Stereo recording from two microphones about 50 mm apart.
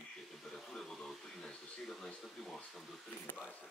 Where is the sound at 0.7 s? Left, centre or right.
Centre.